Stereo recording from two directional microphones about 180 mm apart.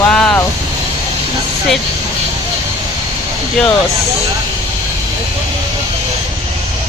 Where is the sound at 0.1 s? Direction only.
5° left (ahead or behind).